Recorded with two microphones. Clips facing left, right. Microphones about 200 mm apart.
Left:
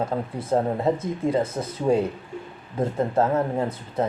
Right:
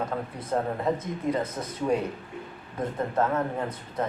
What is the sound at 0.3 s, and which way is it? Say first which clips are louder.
Speech: left 6 dB; 25° left (ahead or behind).